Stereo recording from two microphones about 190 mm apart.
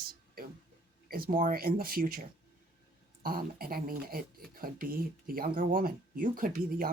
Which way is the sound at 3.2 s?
50° right (ahead or behind).